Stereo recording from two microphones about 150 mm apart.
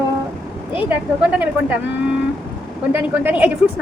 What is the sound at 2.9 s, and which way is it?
Speech, 10° right (ahead or behind).